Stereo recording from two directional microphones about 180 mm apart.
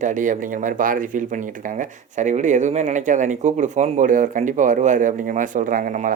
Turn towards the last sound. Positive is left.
turn(degrees=-45)  # may be behind; listen again after turning